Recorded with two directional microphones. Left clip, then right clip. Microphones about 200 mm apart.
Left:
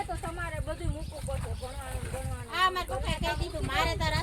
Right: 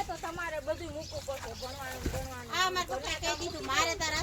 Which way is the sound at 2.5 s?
25° left (ahead or behind).